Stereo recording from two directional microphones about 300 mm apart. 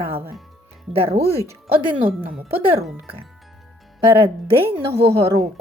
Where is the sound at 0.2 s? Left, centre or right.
Centre.